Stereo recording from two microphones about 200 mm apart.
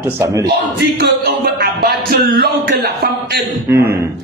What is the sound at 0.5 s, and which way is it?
A man's voice, 55° right (ahead or behind).